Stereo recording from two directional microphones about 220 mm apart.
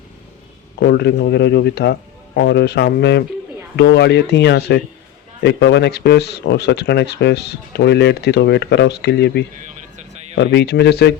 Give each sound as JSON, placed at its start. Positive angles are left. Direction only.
{"t": 0.8, "sound": "speech", "side_deg": 50}